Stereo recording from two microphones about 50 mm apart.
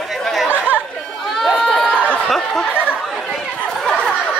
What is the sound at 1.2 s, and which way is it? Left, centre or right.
Run, centre.